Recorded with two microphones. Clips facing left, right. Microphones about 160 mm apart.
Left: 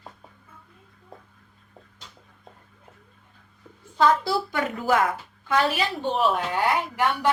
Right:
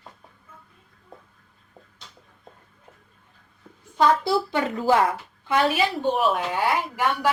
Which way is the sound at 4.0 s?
25° right (ahead or behind).